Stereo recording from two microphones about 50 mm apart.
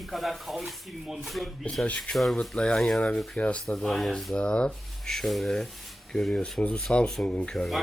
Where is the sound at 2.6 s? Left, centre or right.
Centre.